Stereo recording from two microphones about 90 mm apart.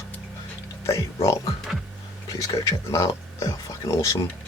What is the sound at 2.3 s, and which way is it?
Speech, 40° left (ahead or behind).